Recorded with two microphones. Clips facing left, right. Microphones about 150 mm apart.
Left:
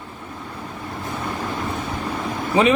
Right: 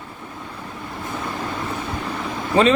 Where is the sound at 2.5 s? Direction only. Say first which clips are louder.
Right 1 dB; 10° left (ahead or behind).